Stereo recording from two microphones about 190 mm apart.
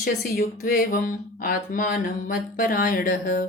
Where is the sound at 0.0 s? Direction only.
55° left (ahead or behind).